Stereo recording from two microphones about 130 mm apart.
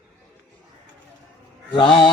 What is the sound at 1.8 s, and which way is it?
Speech, 40° left (ahead or behind).